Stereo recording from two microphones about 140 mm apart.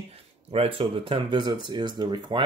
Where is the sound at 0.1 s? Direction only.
45° right (ahead or behind).